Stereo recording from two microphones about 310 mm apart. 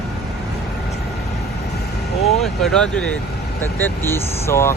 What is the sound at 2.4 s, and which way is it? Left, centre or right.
Speech, centre.